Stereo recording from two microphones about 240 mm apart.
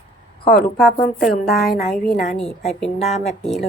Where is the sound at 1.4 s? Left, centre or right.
Centre.